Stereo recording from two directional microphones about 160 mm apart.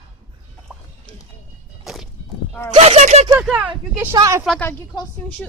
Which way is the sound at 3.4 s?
5° right (ahead or behind).